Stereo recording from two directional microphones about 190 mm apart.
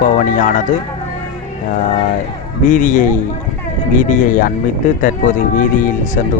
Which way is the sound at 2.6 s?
45° left (ahead or behind).